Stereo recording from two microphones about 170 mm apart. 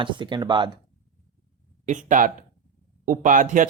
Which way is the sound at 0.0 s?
30° right (ahead or behind).